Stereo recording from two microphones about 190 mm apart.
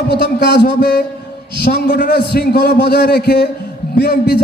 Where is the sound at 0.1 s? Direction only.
60° left (ahead or behind).